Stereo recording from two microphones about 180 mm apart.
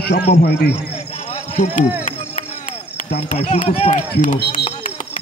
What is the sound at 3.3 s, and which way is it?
Speech, 45° left (ahead or behind).